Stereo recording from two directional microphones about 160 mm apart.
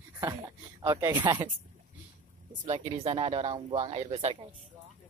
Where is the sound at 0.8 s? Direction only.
20° right (ahead or behind).